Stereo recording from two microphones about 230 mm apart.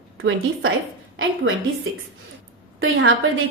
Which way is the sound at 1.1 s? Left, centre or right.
Right.